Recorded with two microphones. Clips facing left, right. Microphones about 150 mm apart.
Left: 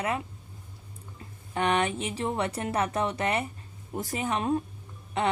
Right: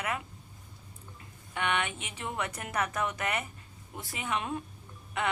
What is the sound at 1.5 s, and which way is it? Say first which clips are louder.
A woman's voice: left 6 dB; 35° left (ahead or behind).